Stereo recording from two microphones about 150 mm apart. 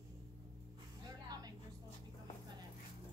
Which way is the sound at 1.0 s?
25° right (ahead or behind).